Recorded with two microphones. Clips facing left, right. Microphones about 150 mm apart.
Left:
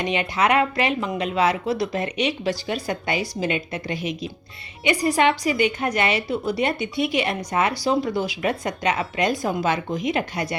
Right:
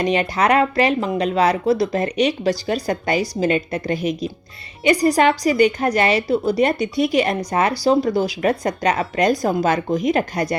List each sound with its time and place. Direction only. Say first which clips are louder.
0.0 s a woman's voice: right 4 dB; 40° right (ahead or behind)